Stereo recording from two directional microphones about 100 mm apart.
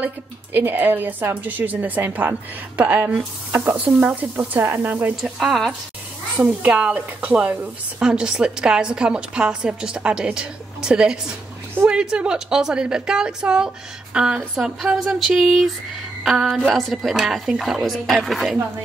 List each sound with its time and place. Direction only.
0.0 s speech: 20° right (ahead or behind)
5.2 s speech: centre (ahead or behind)
6.3 s speech: 15° right (ahead or behind)